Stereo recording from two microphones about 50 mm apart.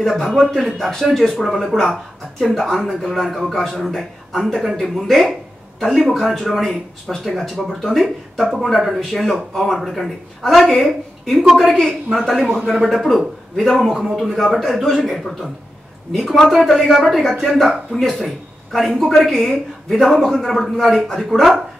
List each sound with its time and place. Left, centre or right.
0.0 s speech: centre